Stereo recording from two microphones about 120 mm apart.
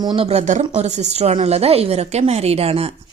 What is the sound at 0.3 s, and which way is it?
A woman's voice, 75° right (ahead or behind).